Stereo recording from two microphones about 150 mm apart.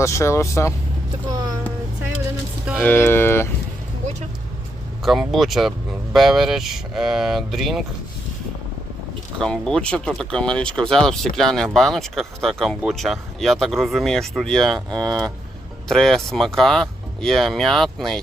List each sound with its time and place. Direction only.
0.0 s speech: 20° left (ahead or behind)
2.7 s speech: 10° left (ahead or behind)
5.3 s speech: centre (ahead or behind)
9.4 s speech: 5° left (ahead or behind)